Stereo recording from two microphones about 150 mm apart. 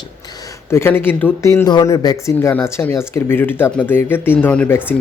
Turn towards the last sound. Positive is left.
turn(degrees=10)  # may be behind; listen again after turning